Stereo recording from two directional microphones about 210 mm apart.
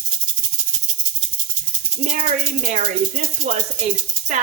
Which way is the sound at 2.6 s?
35° right (ahead or behind).